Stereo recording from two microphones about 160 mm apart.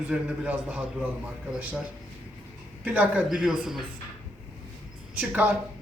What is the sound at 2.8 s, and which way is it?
A man's voice, 10° right (ahead or behind).